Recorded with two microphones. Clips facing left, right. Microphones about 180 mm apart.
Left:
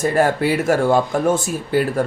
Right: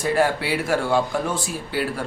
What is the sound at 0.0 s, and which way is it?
Speech, 45° left (ahead or behind).